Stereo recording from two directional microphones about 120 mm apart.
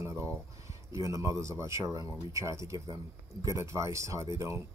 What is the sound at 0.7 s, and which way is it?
Speech, 25° right (ahead or behind).